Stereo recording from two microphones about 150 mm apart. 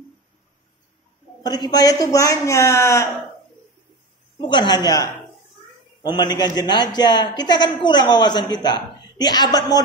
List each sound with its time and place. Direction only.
1.4 s a woman's voice: 25° left (ahead or behind)
4.4 s a woman's voice: 30° left (ahead or behind)